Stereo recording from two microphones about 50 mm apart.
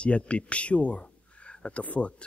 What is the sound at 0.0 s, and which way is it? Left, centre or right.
Speech, left.